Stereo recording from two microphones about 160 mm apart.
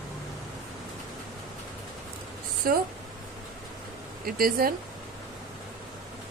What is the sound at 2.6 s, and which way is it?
Speech, 65° right (ahead or behind).